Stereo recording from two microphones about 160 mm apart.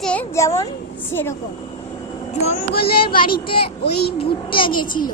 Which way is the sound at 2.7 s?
75° left (ahead or behind).